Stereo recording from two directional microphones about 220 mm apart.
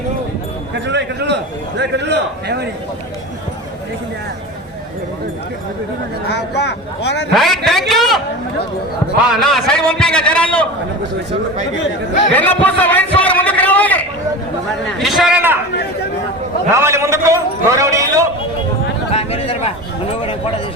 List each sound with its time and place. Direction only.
0.9 s a man's voice: 50° right (ahead or behind)
6.2 s speech: 50° left (ahead or behind)
7.3 s a man's voice: centre (ahead or behind)
9.3 s a man's voice: centre (ahead or behind)
12.3 s a sound: 5° left (ahead or behind)
14.9 s a man's voice: centre (ahead or behind)
16.7 s a man's voice: 10° right (ahead or behind)
19.1 s a sound: 25° left (ahead or behind)